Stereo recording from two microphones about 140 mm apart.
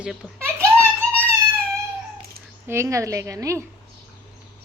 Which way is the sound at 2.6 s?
20° right (ahead or behind).